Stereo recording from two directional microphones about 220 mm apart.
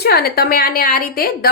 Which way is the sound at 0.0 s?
45° left (ahead or behind).